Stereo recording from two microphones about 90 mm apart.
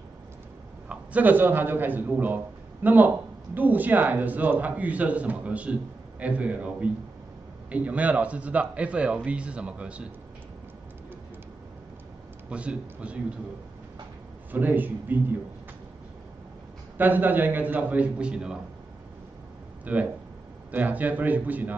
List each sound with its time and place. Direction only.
0.8 s a man's voice: 20° right (ahead or behind)
12.4 s a man's voice: 15° right (ahead or behind)
14.5 s a man's voice: 20° right (ahead or behind)
16.9 s a man's voice: 20° right (ahead or behind)
19.8 s a man's voice: 15° right (ahead or behind)